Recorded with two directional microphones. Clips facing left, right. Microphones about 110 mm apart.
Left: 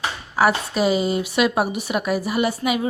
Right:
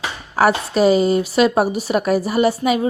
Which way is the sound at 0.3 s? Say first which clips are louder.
Right 4 dB; 40° right (ahead or behind).